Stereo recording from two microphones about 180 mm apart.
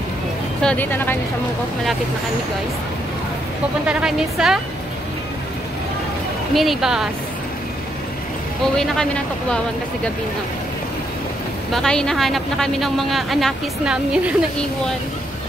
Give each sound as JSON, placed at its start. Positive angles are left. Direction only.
{"t": 0.6, "sound": "speech", "side_deg": 5}
{"t": 3.8, "sound": "a woman's voice", "side_deg": -5}
{"t": 6.5, "sound": "a woman's voice", "side_deg": 0}
{"t": 8.7, "sound": "a woman's voice", "side_deg": 5}
{"t": 11.7, "sound": "a woman's voice", "side_deg": 5}